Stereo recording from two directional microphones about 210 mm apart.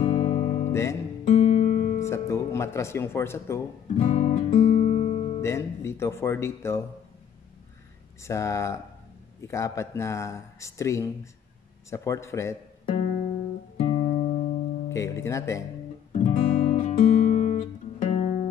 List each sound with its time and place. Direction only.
0.0 s guitar: 30° left (ahead or behind)
1.2 s music: 35° left (ahead or behind)
2.0 s speech: 15° left (ahead or behind)
4.0 s guitar: 30° left (ahead or behind)
5.4 s speech: 15° left (ahead or behind)
8.2 s speech: 15° left (ahead or behind)
12.8 s music: 40° left (ahead or behind)
14.9 s speech: 15° left (ahead or behind)
16.1 s guitar: 35° left (ahead or behind)